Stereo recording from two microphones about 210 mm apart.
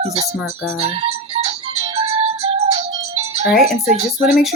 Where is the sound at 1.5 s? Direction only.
30° right (ahead or behind).